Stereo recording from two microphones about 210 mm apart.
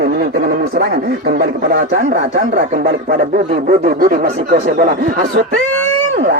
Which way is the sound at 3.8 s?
40° right (ahead or behind).